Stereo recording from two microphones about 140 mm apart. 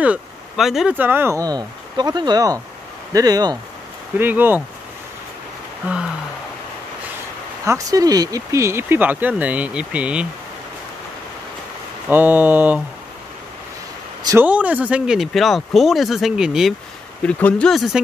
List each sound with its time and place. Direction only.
0.0 s speech: 5° right (ahead or behind)
0.9 s speech: 15° right (ahead or behind)
4.2 s speech: 15° right (ahead or behind)
7.6 s speech: 25° right (ahead or behind); by 10.2 s 10° right (ahead or behind)
12.1 s speech: 15° right (ahead or behind)
14.4 s speech: 10° right (ahead or behind)
17.2 s speech: 10° left (ahead or behind)